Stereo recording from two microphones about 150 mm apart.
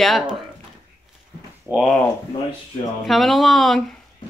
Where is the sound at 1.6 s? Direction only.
Centre (ahead or behind).